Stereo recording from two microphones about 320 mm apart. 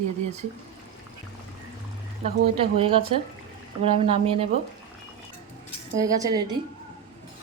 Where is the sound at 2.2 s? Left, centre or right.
Centre.